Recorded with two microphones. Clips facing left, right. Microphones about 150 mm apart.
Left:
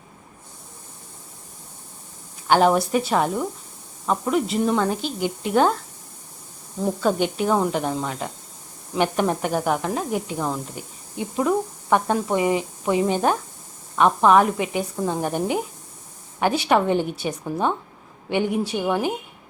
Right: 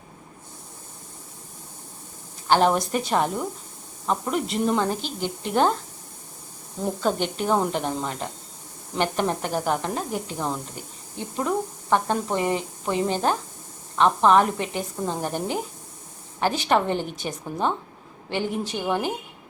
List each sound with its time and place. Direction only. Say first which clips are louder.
2.5 s a woman's voice: left 3 dB; 5° left (ahead or behind)
6.8 s a woman's voice: left 3 dB; 5° left (ahead or behind)
16.4 s a woman's voice: left 2 dB; 10° left (ahead or behind)